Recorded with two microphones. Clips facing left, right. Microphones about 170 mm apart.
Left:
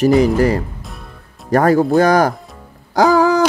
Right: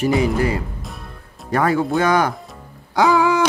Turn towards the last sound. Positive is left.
turn(degrees=40)  # may be behind; listen again after turning